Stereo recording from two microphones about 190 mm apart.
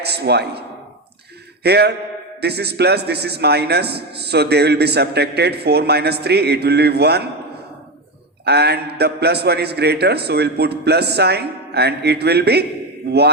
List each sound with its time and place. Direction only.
0.0 s speech: 60° right (ahead or behind)
1.6 s a man's voice: 60° right (ahead or behind)
8.4 s a man's voice: 60° right (ahead or behind)